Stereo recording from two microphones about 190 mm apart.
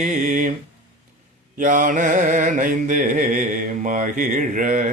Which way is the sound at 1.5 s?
45° right (ahead or behind).